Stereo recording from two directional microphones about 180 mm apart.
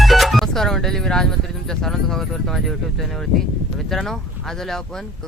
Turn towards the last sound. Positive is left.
turn(degrees=0)  # may be behind; listen again after turning